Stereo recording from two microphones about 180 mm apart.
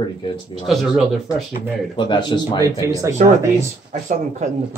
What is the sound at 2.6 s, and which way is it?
Speech, 20° right (ahead or behind).